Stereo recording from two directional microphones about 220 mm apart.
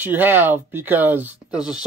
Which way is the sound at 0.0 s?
10° right (ahead or behind).